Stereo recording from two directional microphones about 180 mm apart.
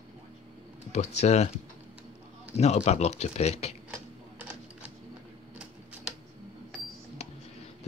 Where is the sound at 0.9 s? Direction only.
40° left (ahead or behind).